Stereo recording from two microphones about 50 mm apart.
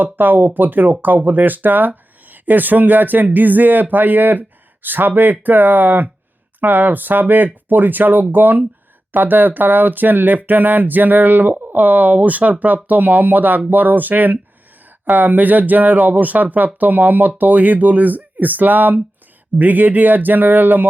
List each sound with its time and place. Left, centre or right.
0.0 s speech: right